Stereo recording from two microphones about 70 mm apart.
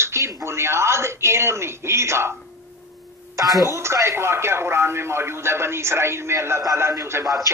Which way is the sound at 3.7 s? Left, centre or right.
Right.